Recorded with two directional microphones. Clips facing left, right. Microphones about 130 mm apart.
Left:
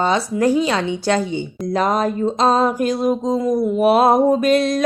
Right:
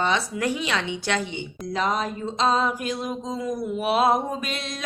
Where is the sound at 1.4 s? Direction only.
45° left (ahead or behind).